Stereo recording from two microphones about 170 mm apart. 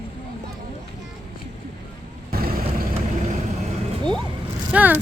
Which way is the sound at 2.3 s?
60° right (ahead or behind).